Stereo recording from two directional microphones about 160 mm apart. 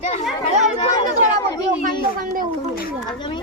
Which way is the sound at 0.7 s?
30° left (ahead or behind).